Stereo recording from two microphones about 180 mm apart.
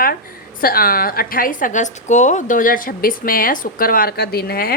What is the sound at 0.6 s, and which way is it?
A woman's voice, 55° left (ahead or behind).